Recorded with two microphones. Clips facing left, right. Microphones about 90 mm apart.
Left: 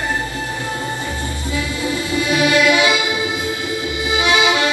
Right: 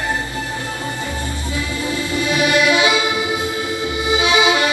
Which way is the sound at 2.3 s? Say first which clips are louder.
Left 1 dB; 20° right (ahead or behind).